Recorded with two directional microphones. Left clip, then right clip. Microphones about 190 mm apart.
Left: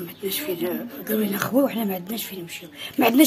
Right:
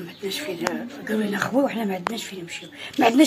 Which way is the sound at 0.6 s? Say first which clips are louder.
Right 1 dB; 15° left (ahead or behind).